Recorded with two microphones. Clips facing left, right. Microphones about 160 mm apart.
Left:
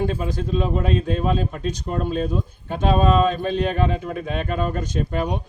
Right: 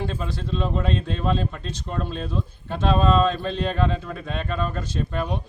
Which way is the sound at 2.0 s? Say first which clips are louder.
Left 6 dB; 45° left (ahead or behind).